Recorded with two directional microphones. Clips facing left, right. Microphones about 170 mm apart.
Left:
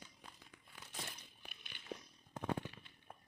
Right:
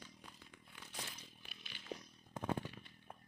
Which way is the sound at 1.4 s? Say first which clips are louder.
Left 4 dB; 55° left (ahead or behind).